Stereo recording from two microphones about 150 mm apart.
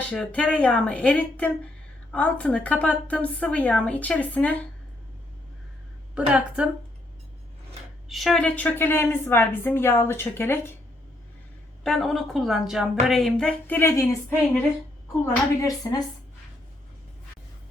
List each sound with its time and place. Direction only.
0.1 s speech: 5° left (ahead or behind)
6.1 s a woman's voice: 5° right (ahead or behind)
8.1 s speech: centre (ahead or behind)
11.8 s a woman's voice: 5° left (ahead or behind); by 16.0 s 25° left (ahead or behind)